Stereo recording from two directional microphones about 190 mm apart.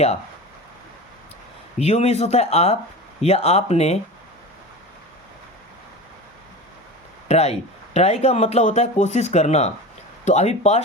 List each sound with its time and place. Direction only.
1.8 s speech: 35° left (ahead or behind)
7.3 s speech: 35° left (ahead or behind)